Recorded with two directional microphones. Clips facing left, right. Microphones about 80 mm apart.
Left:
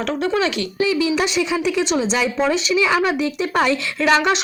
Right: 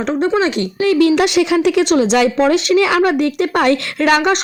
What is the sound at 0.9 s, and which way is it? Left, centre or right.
A woman's voice, right.